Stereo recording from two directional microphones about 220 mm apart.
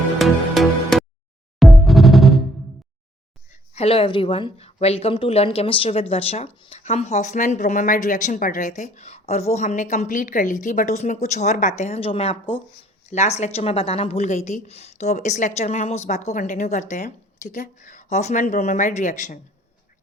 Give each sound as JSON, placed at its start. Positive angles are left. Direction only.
{"t": 0.2, "sound": "music", "side_deg": 0}
{"t": 3.8, "sound": "speech", "side_deg": 25}